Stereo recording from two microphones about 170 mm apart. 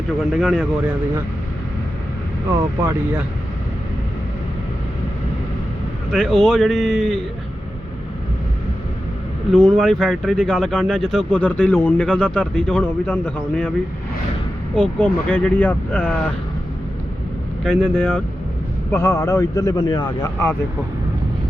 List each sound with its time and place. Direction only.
0.2 s speech: centre (ahead or behind)
0.6 s speech: 10° right (ahead or behind)
2.8 s speech: 15° right (ahead or behind)
6.1 s speech: 5° left (ahead or behind)
9.5 s speech: 5° left (ahead or behind)
14.8 s speech: 10° left (ahead or behind)
17.6 s speech: 5° left (ahead or behind)
18.9 s speech: 20° left (ahead or behind)